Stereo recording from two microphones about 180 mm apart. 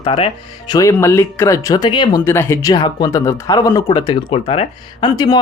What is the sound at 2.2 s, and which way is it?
Speech, 15° left (ahead or behind).